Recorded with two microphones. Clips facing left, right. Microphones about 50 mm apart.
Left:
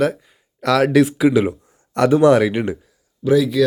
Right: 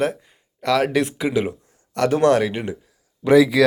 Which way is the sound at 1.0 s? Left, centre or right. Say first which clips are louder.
Left 6 dB; centre.